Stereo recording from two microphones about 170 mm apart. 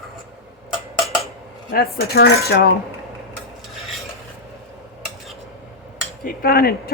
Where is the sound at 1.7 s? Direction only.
60° left (ahead or behind).